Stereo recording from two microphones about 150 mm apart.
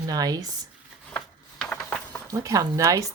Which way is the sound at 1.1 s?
10° left (ahead or behind).